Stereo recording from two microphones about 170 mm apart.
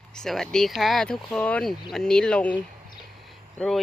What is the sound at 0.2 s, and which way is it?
Speech, 5° left (ahead or behind).